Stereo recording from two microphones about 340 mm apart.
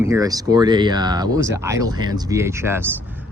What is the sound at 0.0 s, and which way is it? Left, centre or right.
Speech, centre.